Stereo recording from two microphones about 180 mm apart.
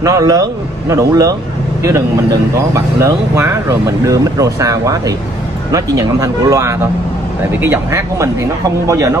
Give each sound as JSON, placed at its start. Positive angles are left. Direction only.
{"t": 0.0, "sound": "speech", "side_deg": -20}